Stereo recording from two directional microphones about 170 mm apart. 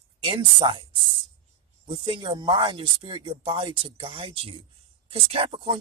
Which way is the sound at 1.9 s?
30° right (ahead or behind).